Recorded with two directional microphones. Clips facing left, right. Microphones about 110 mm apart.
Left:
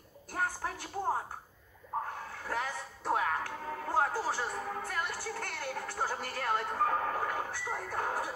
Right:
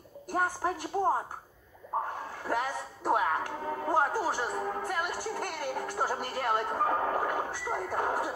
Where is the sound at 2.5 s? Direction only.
15° right (ahead or behind).